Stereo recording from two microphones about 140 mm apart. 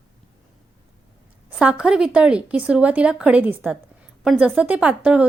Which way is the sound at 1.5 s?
10° right (ahead or behind).